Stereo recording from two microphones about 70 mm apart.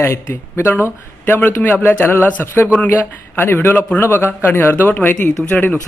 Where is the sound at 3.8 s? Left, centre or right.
Left.